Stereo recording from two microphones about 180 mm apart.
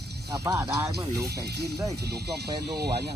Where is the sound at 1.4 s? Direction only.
65° right (ahead or behind).